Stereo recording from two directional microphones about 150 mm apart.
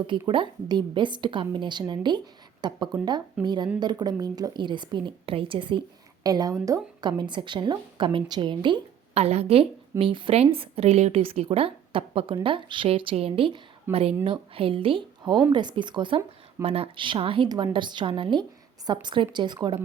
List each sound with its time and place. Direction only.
0.1 s a woman's voice: 35° right (ahead or behind)